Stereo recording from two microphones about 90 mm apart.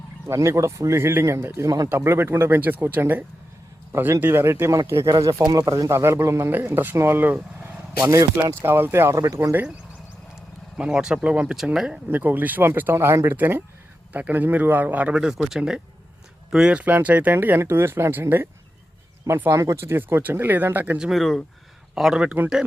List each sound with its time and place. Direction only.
0.3 s speech: 35° right (ahead or behind)
5.0 s speech: 45° right (ahead or behind); by 7.4 s 20° right (ahead or behind)
8.0 s speech: 35° right (ahead or behind)
10.8 s speech: 10° right (ahead or behind)
12.1 s speech: 20° right (ahead or behind)
21.0 s speech: centre (ahead or behind)